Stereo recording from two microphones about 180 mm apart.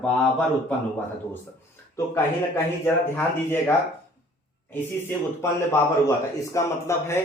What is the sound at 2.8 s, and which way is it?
Speech, 10° left (ahead or behind).